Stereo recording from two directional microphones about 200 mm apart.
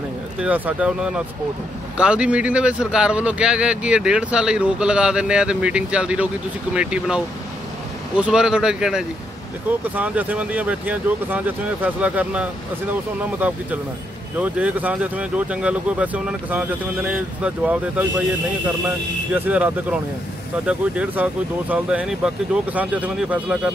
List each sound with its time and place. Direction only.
0.4 s speech: 5° right (ahead or behind)
19.3 s speech: 10° right (ahead or behind)